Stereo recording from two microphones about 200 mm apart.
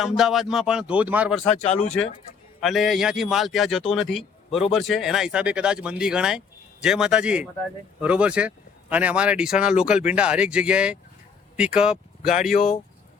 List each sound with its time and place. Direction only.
0.2 s speech: centre (ahead or behind)
1.7 s speech: 35° left (ahead or behind)
2.6 s speech: centre (ahead or behind)